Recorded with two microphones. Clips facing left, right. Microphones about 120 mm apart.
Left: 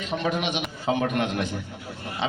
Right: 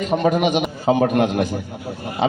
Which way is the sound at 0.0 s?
45° right (ahead or behind).